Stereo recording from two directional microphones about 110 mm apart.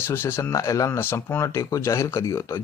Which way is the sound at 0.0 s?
20° left (ahead or behind).